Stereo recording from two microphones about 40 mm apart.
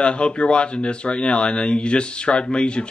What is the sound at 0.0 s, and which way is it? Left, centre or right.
Speech, left.